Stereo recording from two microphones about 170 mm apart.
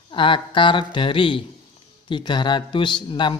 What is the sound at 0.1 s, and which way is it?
Speech, 30° left (ahead or behind).